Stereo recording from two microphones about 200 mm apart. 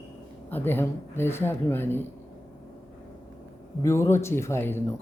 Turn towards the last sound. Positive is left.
turn(degrees=10)  # may be behind; listen again after turning